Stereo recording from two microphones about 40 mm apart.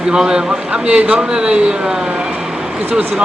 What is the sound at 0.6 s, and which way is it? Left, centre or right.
Speech, right.